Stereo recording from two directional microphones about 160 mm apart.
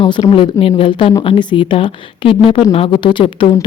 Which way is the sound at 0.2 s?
35° left (ahead or behind).